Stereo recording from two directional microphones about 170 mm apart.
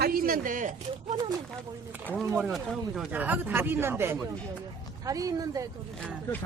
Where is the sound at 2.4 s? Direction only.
Centre (ahead or behind); by 5.6 s 20° right (ahead or behind).